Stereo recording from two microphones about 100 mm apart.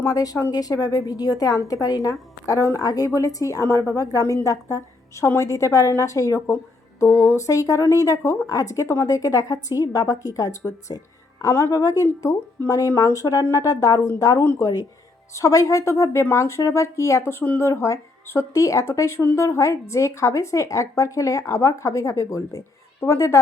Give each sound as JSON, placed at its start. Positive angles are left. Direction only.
{"t": 0.0, "sound": "a woman's voice", "side_deg": 40}
{"t": 17.4, "sound": "speech", "side_deg": 15}
{"t": 17.7, "sound": "a woman's voice", "side_deg": 30}